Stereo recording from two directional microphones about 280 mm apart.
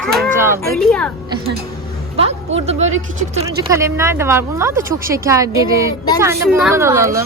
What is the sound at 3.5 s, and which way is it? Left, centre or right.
A woman's voice, centre.